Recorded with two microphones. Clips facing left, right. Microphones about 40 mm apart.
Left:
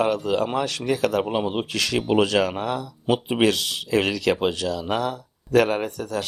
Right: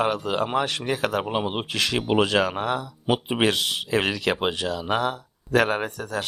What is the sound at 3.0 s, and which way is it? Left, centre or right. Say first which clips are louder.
Speech: left 2 dB; centre.